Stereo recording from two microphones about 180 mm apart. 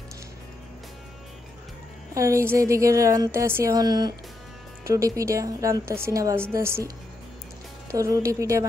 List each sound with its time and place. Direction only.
2.1 s speech: 15° right (ahead or behind)
7.9 s speech: 15° right (ahead or behind)